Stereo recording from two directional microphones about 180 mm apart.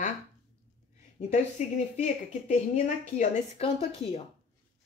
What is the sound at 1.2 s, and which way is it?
Speech, 40° left (ahead or behind).